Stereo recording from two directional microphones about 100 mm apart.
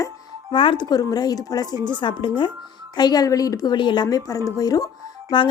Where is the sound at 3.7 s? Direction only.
50° left (ahead or behind).